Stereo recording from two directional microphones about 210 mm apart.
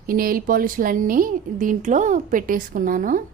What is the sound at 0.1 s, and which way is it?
A woman's voice, 45° right (ahead or behind).